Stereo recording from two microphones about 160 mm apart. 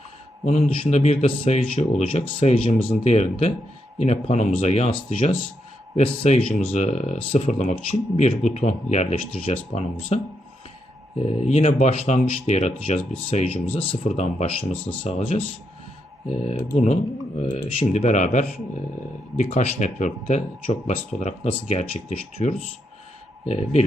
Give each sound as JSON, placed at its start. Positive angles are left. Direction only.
{"t": 0.4, "sound": "speech", "side_deg": 40}
{"t": 11.2, "sound": "speech", "side_deg": 40}